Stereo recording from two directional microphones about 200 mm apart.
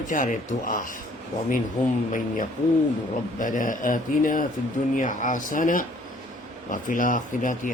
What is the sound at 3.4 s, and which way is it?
Speech, 40° left (ahead or behind).